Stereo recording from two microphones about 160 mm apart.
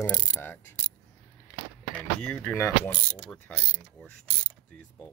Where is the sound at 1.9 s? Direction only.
5° left (ahead or behind).